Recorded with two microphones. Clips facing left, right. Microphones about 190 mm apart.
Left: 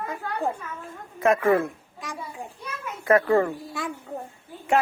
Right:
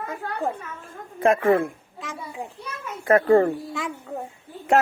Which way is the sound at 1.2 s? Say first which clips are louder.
Right 1 dB; 30° right (ahead or behind).